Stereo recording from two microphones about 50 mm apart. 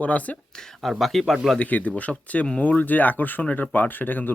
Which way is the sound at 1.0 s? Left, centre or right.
Centre.